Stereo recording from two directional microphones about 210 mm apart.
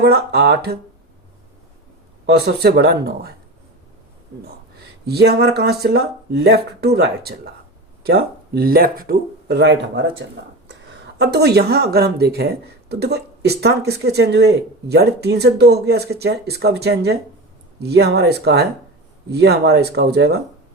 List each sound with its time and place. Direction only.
0.0 s speech: 50° right (ahead or behind)
2.2 s speech: 50° right (ahead or behind)
5.0 s speech: 50° right (ahead or behind)